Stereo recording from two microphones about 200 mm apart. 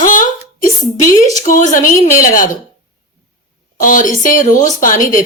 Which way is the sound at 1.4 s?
40° left (ahead or behind).